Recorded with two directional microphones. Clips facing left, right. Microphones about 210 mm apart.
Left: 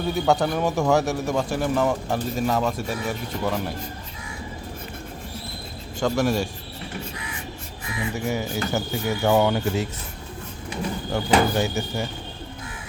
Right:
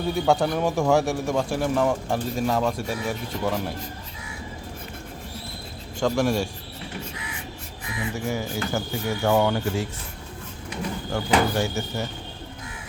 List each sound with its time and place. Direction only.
0.0 s a man's voice: centre (ahead or behind)
6.0 s a man's voice: centre (ahead or behind)
8.1 s speech: 20° left (ahead or behind)
11.1 s speech: 20° left (ahead or behind)